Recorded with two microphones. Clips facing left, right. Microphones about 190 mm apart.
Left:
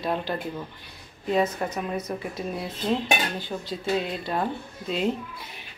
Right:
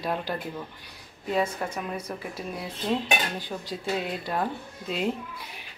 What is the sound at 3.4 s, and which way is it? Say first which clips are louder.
Speech: left 2 dB; 10° right (ahead or behind).